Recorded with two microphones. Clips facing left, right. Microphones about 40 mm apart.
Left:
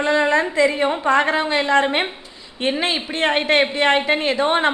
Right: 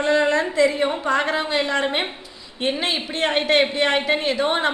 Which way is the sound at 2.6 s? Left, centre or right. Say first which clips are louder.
Left 2 dB; left.